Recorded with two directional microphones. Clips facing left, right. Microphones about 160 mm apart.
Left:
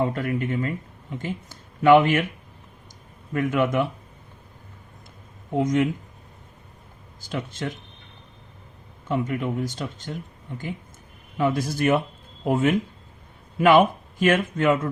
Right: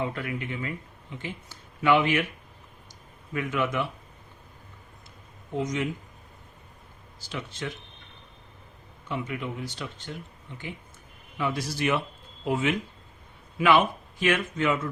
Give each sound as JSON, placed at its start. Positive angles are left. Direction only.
{"t": 0.0, "sound": "speech", "side_deg": 45}
{"t": 3.3, "sound": "speech", "side_deg": 45}
{"t": 5.5, "sound": "speech", "side_deg": 55}
{"t": 7.3, "sound": "speech", "side_deg": 50}
{"t": 9.0, "sound": "speech", "side_deg": 45}